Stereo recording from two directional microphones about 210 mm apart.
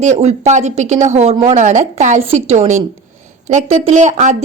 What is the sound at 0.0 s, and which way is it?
A woman's voice, 30° right (ahead or behind).